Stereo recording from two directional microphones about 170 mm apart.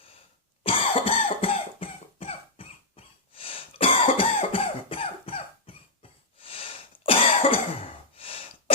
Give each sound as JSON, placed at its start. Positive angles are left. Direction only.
{"t": 0.6, "sound": "cough", "side_deg": 30}